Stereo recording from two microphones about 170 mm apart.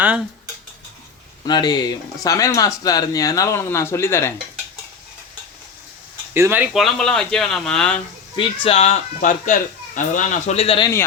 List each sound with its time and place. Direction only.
1.5 s speech: 25° left (ahead or behind)
6.3 s speech: 10° right (ahead or behind)
6.7 s speech: centre (ahead or behind)
8.4 s speech: 35° left (ahead or behind)